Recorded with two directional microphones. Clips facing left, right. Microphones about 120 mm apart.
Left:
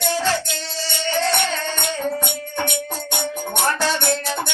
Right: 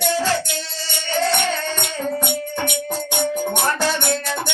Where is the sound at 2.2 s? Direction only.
15° right (ahead or behind).